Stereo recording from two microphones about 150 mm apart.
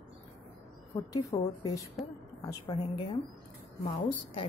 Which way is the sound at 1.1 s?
25° left (ahead or behind).